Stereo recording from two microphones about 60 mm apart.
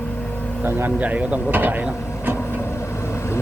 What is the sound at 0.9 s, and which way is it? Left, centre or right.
Speech, right.